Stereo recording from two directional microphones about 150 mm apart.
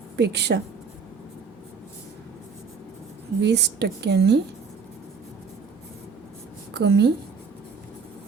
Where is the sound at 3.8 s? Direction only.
90° right.